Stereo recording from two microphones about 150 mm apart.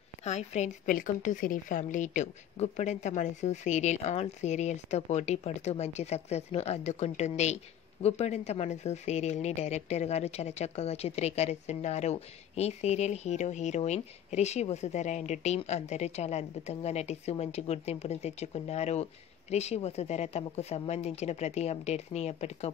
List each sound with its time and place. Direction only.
0.2 s a woman's voice: 50° left (ahead or behind)